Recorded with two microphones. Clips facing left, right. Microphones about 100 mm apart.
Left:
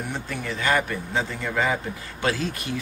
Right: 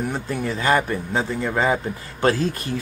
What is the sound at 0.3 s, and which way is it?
Speech, 30° right (ahead or behind).